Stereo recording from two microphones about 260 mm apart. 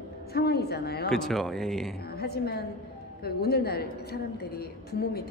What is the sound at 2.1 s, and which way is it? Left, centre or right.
A woman's voice, left.